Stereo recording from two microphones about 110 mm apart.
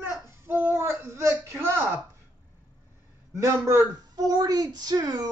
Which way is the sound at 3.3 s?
25° right (ahead or behind).